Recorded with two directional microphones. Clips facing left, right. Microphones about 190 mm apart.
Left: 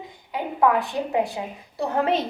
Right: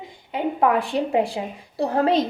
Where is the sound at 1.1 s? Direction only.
30° right (ahead or behind).